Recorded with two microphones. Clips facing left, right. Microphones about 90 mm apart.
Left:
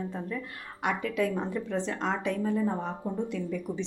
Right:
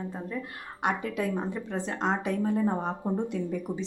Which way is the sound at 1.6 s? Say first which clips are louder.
Left 2 dB; 5° right (ahead or behind).